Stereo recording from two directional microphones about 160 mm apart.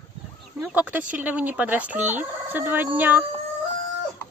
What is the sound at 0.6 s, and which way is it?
Fowl, 10° right (ahead or behind).